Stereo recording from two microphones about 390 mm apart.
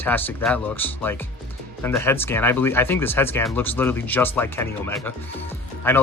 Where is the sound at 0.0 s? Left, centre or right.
Centre.